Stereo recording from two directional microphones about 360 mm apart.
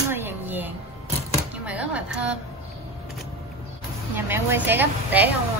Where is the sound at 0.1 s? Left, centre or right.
Centre.